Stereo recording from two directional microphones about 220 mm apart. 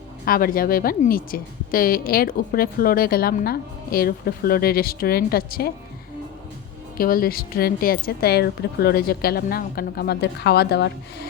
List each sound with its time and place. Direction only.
0.3 s a woman's voice: 40° left (ahead or behind)
6.9 s a woman's voice: 40° left (ahead or behind)